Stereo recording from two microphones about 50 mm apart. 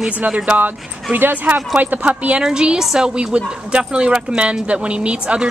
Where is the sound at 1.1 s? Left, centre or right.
Right.